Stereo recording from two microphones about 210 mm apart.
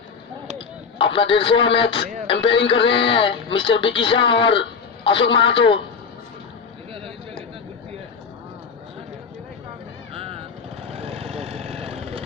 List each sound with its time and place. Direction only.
0.9 s a man's voice: 25° left (ahead or behind)
10.2 s vehicle: 25° right (ahead or behind)